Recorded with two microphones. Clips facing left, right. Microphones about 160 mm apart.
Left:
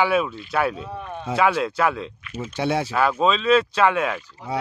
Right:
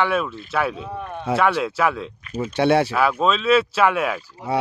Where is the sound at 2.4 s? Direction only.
65° right (ahead or behind).